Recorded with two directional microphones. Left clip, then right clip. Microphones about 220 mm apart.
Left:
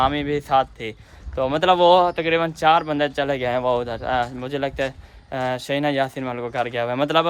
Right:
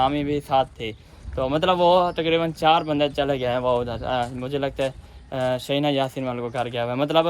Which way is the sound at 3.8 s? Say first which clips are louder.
Left 2 dB; 45° left (ahead or behind).